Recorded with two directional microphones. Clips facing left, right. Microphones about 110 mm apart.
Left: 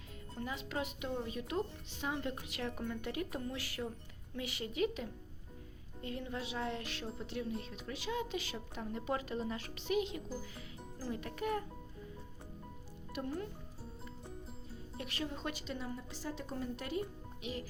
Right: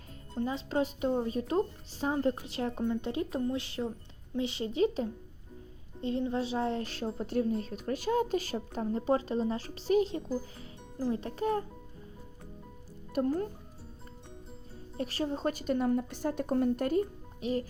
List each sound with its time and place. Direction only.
0.3 s speech: 30° right (ahead or behind)
13.1 s speech: 40° right (ahead or behind)
14.9 s speech: 35° right (ahead or behind)